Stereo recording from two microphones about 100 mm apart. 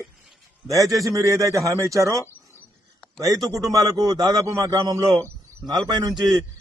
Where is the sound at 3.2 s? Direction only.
40° right (ahead or behind).